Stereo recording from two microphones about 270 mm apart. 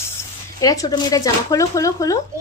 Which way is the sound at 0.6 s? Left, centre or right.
Centre.